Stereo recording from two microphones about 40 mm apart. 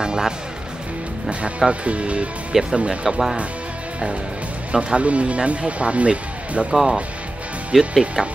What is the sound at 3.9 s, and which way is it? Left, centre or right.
Music, right.